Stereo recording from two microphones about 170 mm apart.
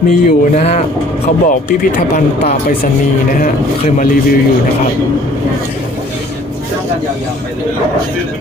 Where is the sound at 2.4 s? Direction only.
45° left (ahead or behind).